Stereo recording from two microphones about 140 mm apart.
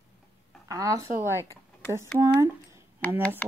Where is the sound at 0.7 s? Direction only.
25° right (ahead or behind).